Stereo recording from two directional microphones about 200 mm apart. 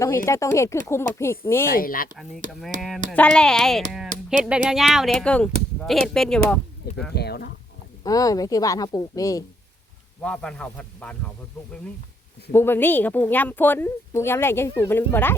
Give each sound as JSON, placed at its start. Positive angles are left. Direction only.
{"t": 0.3, "sound": "a woman's voice", "side_deg": 15}
{"t": 1.6, "sound": "speech", "side_deg": 45}
{"t": 2.5, "sound": "speech", "side_deg": 0}
{"t": 7.1, "sound": "a sound", "side_deg": 55}
{"t": 8.0, "sound": "a woman's voice", "side_deg": 20}
{"t": 10.2, "sound": "speech", "side_deg": 5}
{"t": 12.5, "sound": "a woman's voice", "side_deg": 10}